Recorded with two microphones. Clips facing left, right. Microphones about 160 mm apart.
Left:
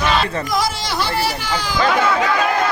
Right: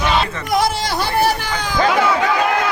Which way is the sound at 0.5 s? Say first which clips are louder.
Right 5 dB; 60° right (ahead or behind).